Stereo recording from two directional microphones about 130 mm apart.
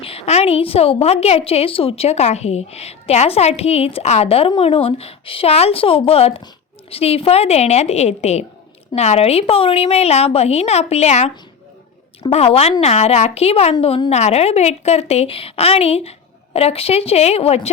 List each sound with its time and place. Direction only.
0.0 s a woman's voice: 50° left (ahead or behind)
12.3 s a woman's voice: 50° left (ahead or behind)